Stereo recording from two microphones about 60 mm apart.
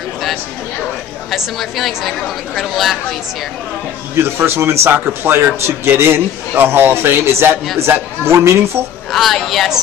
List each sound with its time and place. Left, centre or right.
1.3 s a woman's voice: centre
4.1 s a man's voice: right
9.1 s a woman's voice: centre